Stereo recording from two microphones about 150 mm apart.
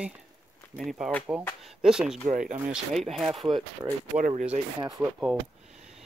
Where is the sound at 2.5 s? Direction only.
10° right (ahead or behind).